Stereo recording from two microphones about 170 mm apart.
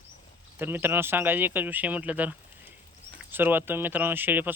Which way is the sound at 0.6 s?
15° right (ahead or behind).